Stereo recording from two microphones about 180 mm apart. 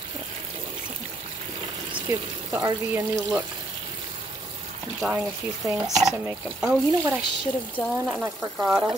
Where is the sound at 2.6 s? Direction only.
20° right (ahead or behind).